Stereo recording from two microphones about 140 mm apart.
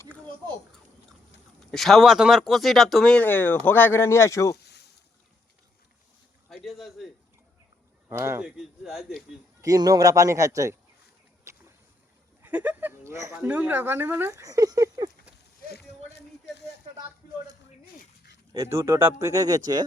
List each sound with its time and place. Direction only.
1.7 s speech: centre (ahead or behind); by 4.5 s 20° left (ahead or behind)
6.5 s a man's voice: centre (ahead or behind)
8.1 s speech: 15° right (ahead or behind)
8.4 s speech: 5° right (ahead or behind)
9.6 s speech: 25° right (ahead or behind)
12.4 s speech: 10° right (ahead or behind); by 15.1 s 25° right (ahead or behind)
18.5 s speech: 20° right (ahead or behind)